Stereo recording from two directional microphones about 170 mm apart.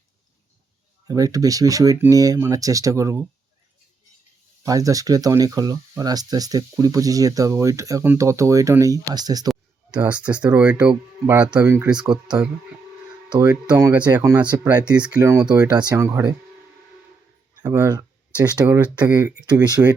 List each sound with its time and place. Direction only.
1.0 s speech: 20° right (ahead or behind)
4.6 s speech: 20° right (ahead or behind)
10.2 s speech: 5° right (ahead or behind)
13.3 s speech: 25° right (ahead or behind)
14.9 s speech: 5° right (ahead or behind)
17.6 s speech: 15° right (ahead or behind)
19.6 s speech: 25° right (ahead or behind)